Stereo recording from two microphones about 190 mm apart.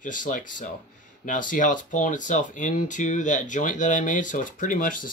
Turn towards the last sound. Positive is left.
turn(degrees=45)  # may be behind; listen again after turning